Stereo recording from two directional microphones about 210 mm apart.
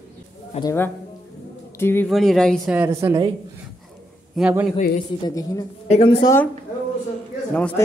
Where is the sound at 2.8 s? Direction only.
10° right (ahead or behind).